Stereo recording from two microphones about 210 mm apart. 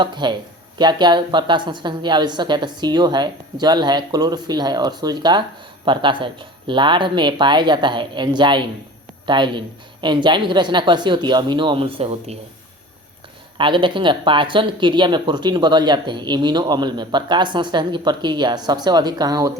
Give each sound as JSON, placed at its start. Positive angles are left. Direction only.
{"t": 0.0, "sound": "speech", "side_deg": -20}
{"t": 13.6, "sound": "speech", "side_deg": -25}